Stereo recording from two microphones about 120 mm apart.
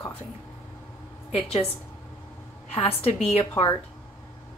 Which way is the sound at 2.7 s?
55° left (ahead or behind).